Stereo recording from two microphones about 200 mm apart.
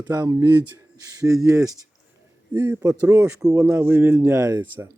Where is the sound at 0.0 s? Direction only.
20° right (ahead or behind).